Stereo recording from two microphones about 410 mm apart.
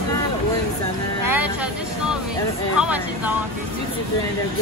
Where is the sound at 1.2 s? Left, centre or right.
Left.